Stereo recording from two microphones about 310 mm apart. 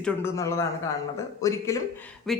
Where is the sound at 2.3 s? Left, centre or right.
Centre.